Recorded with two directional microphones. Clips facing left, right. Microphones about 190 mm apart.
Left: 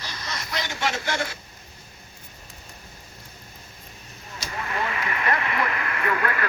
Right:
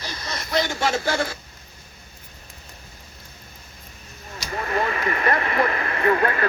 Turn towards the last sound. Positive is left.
turn(degrees=-30)  # may be behind; listen again after turning